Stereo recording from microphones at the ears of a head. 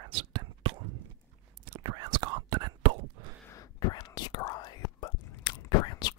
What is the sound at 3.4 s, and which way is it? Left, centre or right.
Whispering, left.